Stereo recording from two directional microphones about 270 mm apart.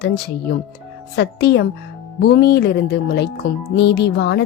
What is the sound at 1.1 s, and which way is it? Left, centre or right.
A woman's voice, left.